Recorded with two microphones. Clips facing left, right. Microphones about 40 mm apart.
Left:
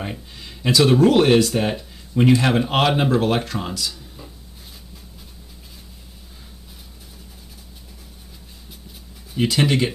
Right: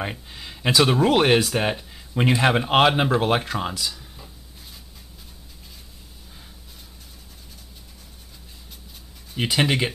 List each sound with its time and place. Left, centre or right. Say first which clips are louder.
0.0 s speech: right 1 dB; centre
9.4 s speech: left 3 dB; centre